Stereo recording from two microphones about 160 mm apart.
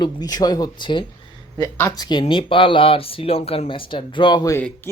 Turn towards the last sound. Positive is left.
turn(degrees=25)  # may be behind; listen again after turning